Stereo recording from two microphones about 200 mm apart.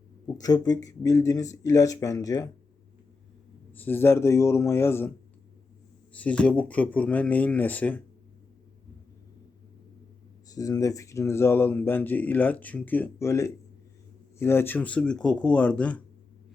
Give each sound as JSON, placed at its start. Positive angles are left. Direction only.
{"t": 0.3, "sound": "speech", "side_deg": 20}
{"t": 3.7, "sound": "speech", "side_deg": 10}
{"t": 6.1, "sound": "speech", "side_deg": 5}
{"t": 10.5, "sound": "speech", "side_deg": 15}